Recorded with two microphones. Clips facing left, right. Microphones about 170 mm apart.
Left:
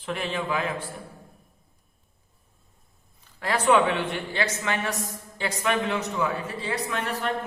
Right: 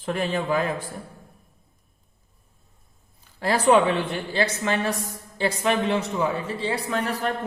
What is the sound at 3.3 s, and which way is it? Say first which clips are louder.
A man's voice: right 3 dB; 30° right (ahead or behind).